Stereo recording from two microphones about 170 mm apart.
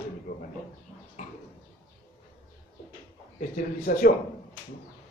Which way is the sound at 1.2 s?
45° left (ahead or behind).